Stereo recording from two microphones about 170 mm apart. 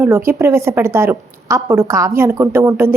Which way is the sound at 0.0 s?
15° right (ahead or behind).